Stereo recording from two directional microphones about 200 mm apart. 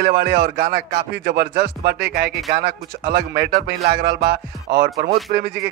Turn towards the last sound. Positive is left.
turn(degrees=-50)  # may be behind; listen again after turning